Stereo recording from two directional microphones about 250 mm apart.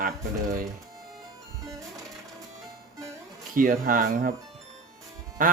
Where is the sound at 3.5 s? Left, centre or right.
Right.